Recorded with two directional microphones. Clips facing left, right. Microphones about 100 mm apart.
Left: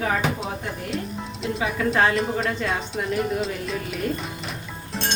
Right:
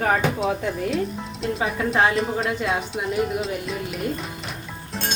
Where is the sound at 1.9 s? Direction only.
Centre (ahead or behind).